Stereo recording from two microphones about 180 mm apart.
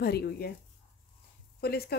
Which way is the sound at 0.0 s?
60° left (ahead or behind).